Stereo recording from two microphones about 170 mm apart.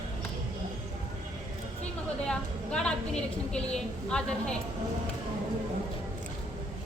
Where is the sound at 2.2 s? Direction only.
5° left (ahead or behind).